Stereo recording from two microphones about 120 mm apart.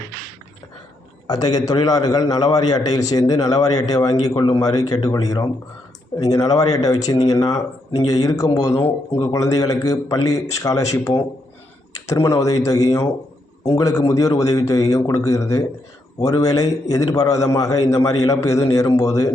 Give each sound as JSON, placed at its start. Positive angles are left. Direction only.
{"t": 1.3, "sound": "a man's voice", "side_deg": 35}